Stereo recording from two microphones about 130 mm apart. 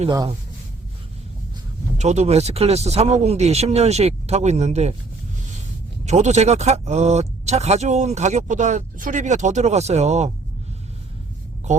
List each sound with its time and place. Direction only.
2.0 s speech: 60° right (ahead or behind)
6.1 s speech: 60° right (ahead or behind)